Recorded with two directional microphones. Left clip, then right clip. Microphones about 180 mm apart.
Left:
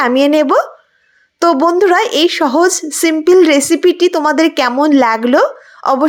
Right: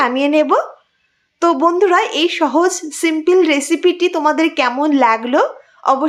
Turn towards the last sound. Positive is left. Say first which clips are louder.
# left 2 dB
turn(degrees=30)  # may be behind; listen again after turning